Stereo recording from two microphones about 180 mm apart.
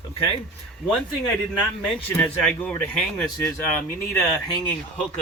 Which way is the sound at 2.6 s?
5° left (ahead or behind).